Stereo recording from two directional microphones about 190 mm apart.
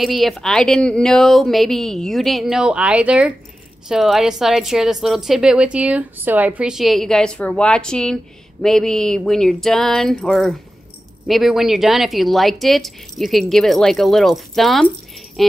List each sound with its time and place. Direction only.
0.0 s a woman's voice: centre (ahead or behind)